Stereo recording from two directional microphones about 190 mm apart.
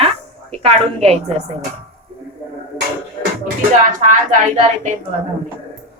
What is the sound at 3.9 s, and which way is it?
Speech, 45° right (ahead or behind).